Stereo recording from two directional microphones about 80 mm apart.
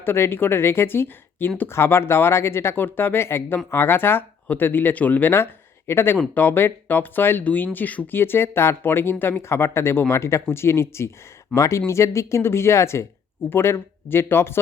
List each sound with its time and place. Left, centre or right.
0.0 s speech: left